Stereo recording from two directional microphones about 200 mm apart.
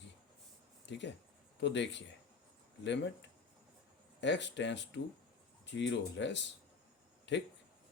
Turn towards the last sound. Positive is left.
turn(degrees=60)  # may be behind; listen again after turning